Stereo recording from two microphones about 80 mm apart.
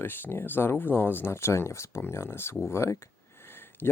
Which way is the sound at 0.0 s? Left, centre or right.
Left.